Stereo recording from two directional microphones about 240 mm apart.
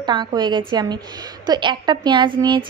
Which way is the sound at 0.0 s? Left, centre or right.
Centre.